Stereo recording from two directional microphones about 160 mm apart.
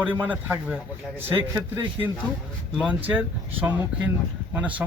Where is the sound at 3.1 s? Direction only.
10° right (ahead or behind).